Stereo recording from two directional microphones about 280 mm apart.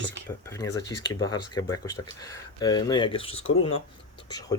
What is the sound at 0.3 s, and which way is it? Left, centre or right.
Speech, centre.